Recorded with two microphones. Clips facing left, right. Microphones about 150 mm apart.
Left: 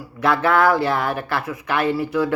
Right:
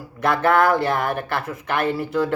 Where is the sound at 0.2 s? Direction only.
50° right (ahead or behind).